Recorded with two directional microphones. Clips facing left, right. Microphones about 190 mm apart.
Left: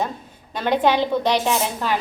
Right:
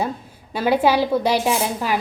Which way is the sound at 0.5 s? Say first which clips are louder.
Right 2 dB; 10° right (ahead or behind).